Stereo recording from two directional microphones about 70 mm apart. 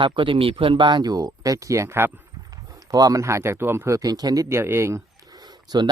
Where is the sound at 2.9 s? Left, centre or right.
Right.